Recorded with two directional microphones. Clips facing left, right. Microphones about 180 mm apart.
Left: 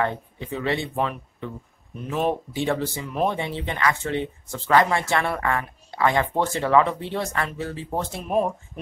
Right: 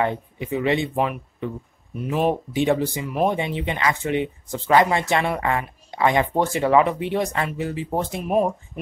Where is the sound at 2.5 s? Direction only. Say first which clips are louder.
Right 4 dB; 20° right (ahead or behind).